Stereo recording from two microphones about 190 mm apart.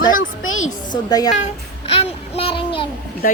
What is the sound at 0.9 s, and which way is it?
Speech, 20° left (ahead or behind).